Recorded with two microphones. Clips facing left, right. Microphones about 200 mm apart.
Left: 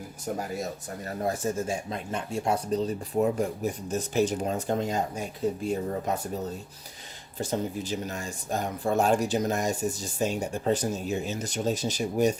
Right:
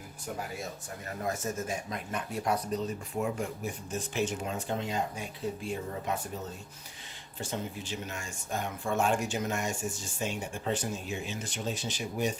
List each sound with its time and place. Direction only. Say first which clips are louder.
1.2 s speech: left 5 dB; 30° left (ahead or behind)